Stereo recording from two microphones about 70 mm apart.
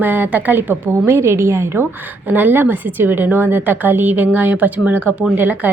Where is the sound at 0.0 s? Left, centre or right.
Right.